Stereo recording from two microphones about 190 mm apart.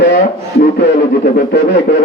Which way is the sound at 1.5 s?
65° left (ahead or behind).